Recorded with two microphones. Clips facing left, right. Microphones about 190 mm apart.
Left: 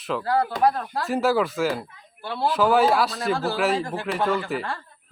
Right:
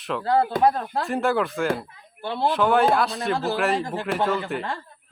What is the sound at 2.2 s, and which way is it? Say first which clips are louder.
Speech: right 1 dB; 25° right (ahead or behind).